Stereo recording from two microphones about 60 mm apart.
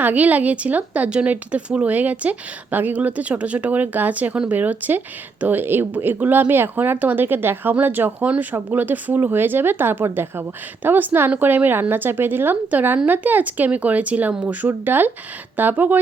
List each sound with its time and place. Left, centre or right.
0.0 s speech: right